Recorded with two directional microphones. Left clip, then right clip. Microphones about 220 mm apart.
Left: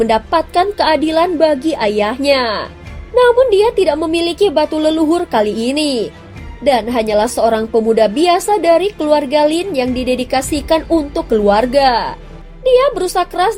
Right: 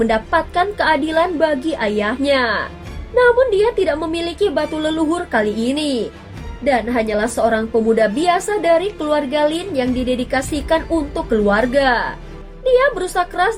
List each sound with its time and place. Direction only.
0.0 s a woman's voice: 30° left (ahead or behind)